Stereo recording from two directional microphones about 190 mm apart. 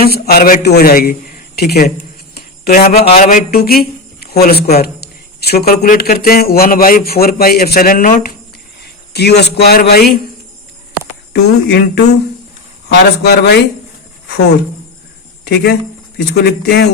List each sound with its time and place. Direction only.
0.0 s a man's voice: 50° left (ahead or behind)
2.3 s jingle bell: 55° left (ahead or behind)
2.8 s a man's voice: 35° left (ahead or behind); by 10.2 s 55° left (ahead or behind)
11.3 s speech: 60° left (ahead or behind)
15.4 s speech: 60° left (ahead or behind)